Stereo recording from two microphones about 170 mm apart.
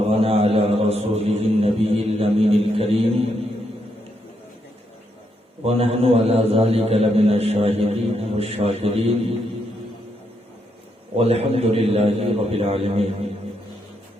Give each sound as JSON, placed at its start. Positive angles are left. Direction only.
{"t": 0.1, "sound": "chant", "side_deg": -35}
{"t": 5.6, "sound": "a man's voice", "side_deg": -35}
{"t": 11.2, "sound": "a man's voice", "side_deg": -35}